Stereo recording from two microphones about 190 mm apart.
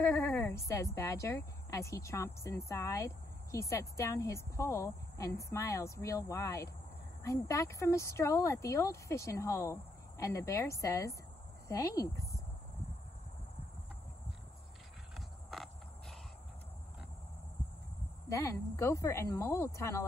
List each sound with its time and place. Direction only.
0.0 s a sound: 15° left (ahead or behind)
0.7 s a woman's voice: 15° left (ahead or behind)
15.1 s cricket: centre (ahead or behind)
18.3 s a woman's voice: 15° left (ahead or behind)